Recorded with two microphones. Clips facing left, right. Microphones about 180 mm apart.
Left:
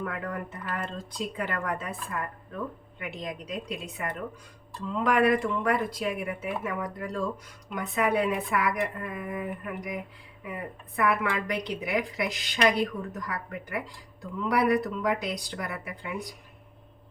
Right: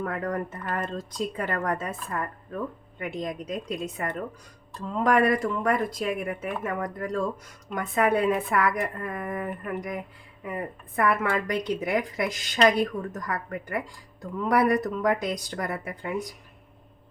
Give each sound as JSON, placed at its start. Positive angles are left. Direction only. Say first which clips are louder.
{"t": 0.0, "sound": "speech", "louder": "right 4 dB", "side_deg": -40}
{"t": 10.4, "sound": "speech", "louder": "right 4 dB", "side_deg": -45}